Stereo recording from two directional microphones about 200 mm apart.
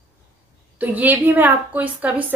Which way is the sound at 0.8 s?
10° right (ahead or behind).